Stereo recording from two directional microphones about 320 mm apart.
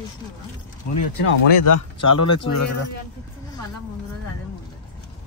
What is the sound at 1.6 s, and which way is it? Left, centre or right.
Speech, left.